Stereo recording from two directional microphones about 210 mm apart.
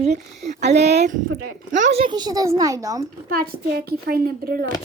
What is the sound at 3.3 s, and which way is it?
Speech, 45° right (ahead or behind).